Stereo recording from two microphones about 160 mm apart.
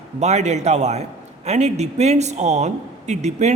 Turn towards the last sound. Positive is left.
turn(degrees=-45)  # may be behind; listen again after turning